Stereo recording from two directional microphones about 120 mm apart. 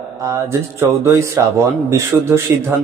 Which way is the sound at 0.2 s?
25° right (ahead or behind).